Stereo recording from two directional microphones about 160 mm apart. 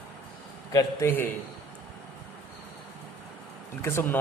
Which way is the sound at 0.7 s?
15° left (ahead or behind).